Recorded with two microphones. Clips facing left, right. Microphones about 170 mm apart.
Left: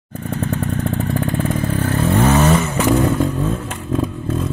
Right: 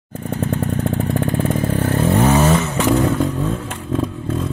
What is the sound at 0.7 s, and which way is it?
Motorcycle, 15° right (ahead or behind).